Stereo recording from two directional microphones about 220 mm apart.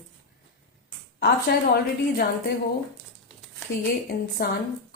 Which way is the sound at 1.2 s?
45° left (ahead or behind).